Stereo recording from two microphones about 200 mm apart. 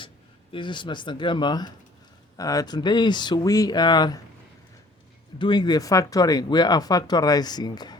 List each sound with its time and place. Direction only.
0.5 s speech: 25° left (ahead or behind)
5.4 s speech: 20° left (ahead or behind)